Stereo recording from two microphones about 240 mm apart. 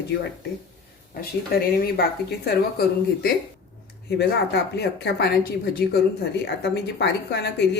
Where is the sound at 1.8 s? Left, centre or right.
Left.